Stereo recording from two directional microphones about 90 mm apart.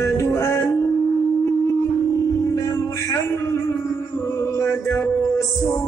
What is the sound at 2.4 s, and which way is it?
Music, 35° left (ahead or behind).